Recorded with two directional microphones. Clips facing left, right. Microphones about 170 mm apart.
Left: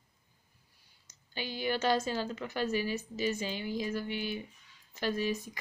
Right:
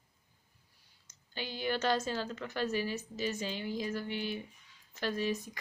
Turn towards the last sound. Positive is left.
turn(degrees=5)  # may be behind; listen again after turning